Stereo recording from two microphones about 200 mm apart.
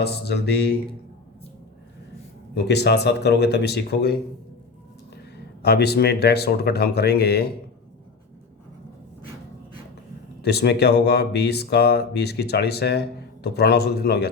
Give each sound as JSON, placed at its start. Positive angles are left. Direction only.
{"t": 0.0, "sound": "speech", "side_deg": 55}
{"t": 2.6, "sound": "speech", "side_deg": 55}
{"t": 5.6, "sound": "speech", "side_deg": 55}
{"t": 10.4, "sound": "speech", "side_deg": 55}